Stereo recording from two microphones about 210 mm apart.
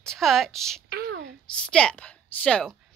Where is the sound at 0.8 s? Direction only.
45° right (ahead or behind).